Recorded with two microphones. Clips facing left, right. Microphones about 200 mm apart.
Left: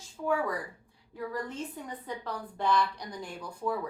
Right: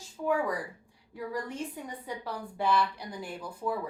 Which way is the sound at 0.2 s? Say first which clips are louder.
Right 1 dB; 20° right (ahead or behind).